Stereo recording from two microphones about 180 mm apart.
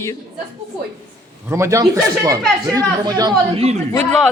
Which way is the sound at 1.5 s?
15° right (ahead or behind).